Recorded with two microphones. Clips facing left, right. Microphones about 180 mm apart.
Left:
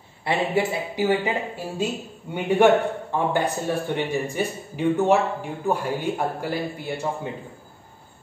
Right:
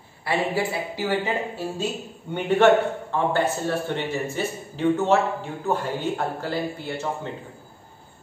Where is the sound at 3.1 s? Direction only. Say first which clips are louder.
Right 1 dB; 15° left (ahead or behind).